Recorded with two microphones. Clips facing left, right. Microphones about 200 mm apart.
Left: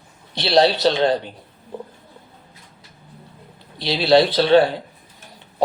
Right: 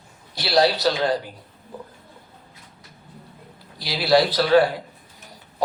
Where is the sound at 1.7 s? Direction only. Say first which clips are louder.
Left 5 dB; 25° left (ahead or behind).